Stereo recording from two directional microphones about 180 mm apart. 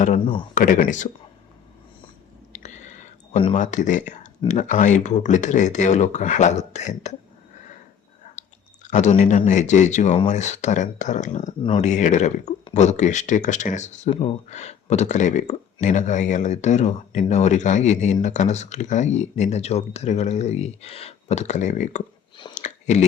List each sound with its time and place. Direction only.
0.5 s speech: 50° left (ahead or behind)
2.5 s whispering: 40° left (ahead or behind)
3.5 s speech: 40° left (ahead or behind)
8.4 s speech: 45° left (ahead or behind)
11.6 s speech: 30° left (ahead or behind)
11.9 s speech: 40° left (ahead or behind)
22.5 s a sound: 40° left (ahead or behind)